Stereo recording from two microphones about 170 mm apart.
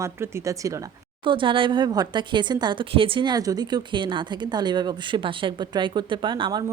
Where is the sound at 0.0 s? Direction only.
15° right (ahead or behind).